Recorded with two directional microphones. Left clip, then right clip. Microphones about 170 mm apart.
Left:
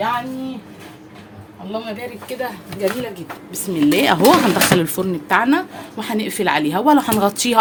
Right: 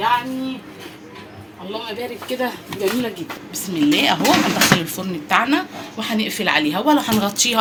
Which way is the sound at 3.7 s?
70° left (ahead or behind).